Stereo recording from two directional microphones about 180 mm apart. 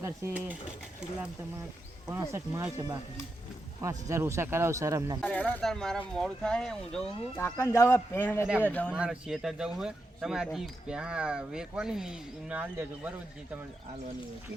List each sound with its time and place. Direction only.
0.0 s speech: 10° right (ahead or behind)
2.0 s speech: 15° right (ahead or behind)
5.2 s a man's voice: 10° left (ahead or behind)
8.9 s speech: 5° right (ahead or behind)